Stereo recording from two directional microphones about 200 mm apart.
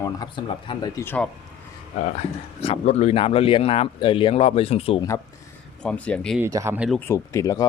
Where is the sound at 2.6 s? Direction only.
30° left (ahead or behind).